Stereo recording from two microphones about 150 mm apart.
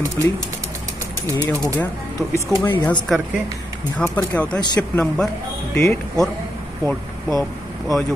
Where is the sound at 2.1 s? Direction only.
15° left (ahead or behind).